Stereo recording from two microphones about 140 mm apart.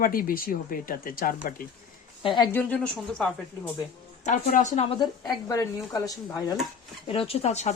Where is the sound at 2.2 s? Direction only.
35° left (ahead or behind).